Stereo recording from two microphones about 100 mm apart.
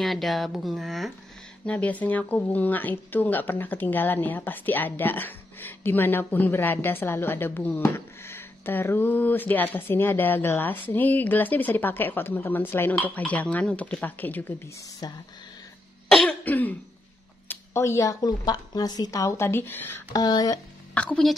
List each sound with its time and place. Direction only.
0.0 s speech: centre (ahead or behind)
1.7 s speech: 15° left (ahead or behind)
15.0 s speech: 45° left (ahead or behind)
16.1 s cough: 5° left (ahead or behind)
16.4 s throat clearing: 15° left (ahead or behind)
17.5 s speech: 25° left (ahead or behind)
20.1 s speech: 45° left (ahead or behind)
20.9 s a woman's voice: 15° left (ahead or behind)